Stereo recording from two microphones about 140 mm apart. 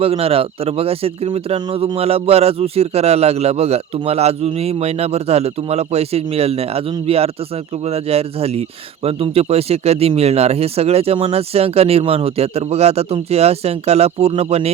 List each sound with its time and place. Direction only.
0.0 s speech: 45° right (ahead or behind)